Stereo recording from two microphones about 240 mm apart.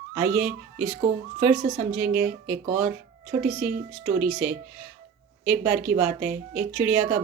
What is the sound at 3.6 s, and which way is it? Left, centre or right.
Speech, centre.